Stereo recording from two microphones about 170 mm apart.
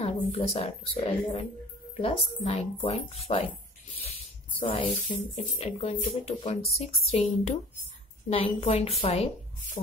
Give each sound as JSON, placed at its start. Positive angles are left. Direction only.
{"t": 0.0, "sound": "a woman's voice", "side_deg": 35}
{"t": 4.6, "sound": "speech", "side_deg": 30}